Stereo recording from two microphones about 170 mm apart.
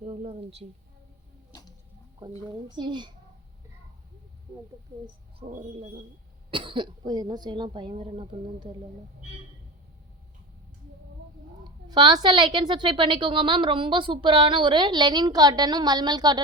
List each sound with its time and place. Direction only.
0.0 s a woman's voice: 35° right (ahead or behind)
2.5 s a woman's voice: 25° right (ahead or behind)
5.4 s a woman's voice: 35° right (ahead or behind)
11.6 s a woman's voice: 25° right (ahead or behind)